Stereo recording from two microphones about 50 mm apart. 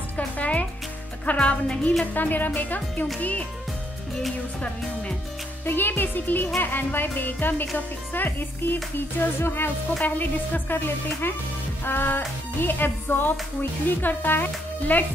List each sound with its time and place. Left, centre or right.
0.4 s music: left
2.1 s speech: left
5.7 s speech: left
10.0 s speech: left